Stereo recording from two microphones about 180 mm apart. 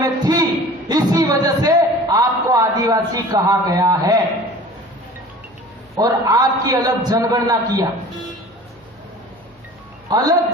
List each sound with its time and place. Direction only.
0.0 s a sound: 20° right (ahead or behind)
0.9 s a man's voice: 20° right (ahead or behind)
6.0 s a man's voice: 20° right (ahead or behind)
10.1 s speech: 20° right (ahead or behind)